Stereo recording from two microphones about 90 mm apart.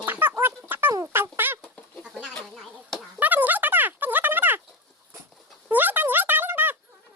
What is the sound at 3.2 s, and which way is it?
Fowl, 20° right (ahead or behind).